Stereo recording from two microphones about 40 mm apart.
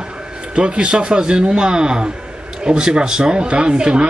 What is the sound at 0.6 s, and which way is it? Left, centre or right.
A man's voice, right.